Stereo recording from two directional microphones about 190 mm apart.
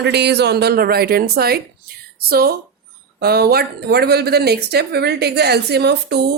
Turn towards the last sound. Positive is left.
turn(degrees=-60)  # may be behind; listen again after turning